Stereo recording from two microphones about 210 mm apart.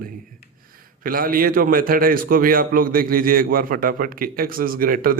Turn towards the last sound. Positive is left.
turn(degrees=-45)  # may be behind; listen again after turning